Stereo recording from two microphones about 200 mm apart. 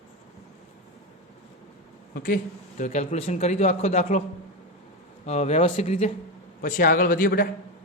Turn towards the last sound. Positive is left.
turn(degrees=45)  # may be behind; listen again after turning